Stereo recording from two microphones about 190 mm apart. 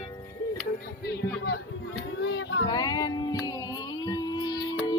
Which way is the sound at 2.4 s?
90° left.